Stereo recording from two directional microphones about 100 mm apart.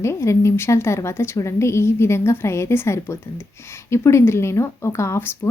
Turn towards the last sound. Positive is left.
turn(degrees=25)  # may be behind; listen again after turning